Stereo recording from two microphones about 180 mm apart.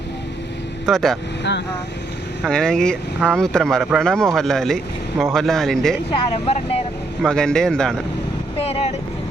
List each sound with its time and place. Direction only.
0.9 s speech: centre (ahead or behind)
2.4 s speech: 5° left (ahead or behind)
6.1 s speech: 35° left (ahead or behind)
7.2 s speech: 5° left (ahead or behind)
8.5 s speech: 35° left (ahead or behind)